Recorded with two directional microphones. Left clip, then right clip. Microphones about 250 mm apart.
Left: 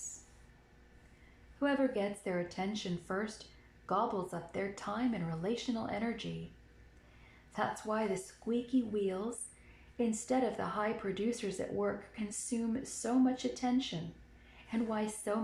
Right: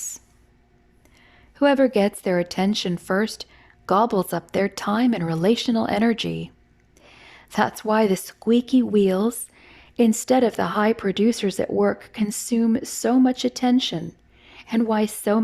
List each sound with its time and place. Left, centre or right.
1.5 s speech: right
7.5 s speech: right